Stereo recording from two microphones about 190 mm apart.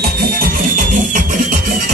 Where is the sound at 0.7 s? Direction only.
45° right (ahead or behind).